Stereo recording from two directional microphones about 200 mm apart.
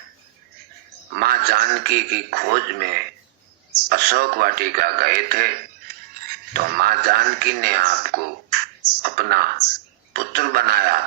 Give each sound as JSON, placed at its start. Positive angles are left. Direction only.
{"t": 1.1, "sound": "a man's voice", "side_deg": -50}